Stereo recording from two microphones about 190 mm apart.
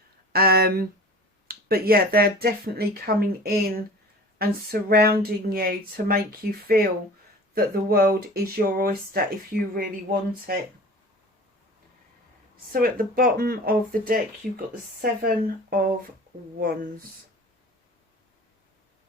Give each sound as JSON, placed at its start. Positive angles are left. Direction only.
{"t": 0.3, "sound": "speech", "side_deg": -55}
{"t": 12.7, "sound": "speech", "side_deg": -50}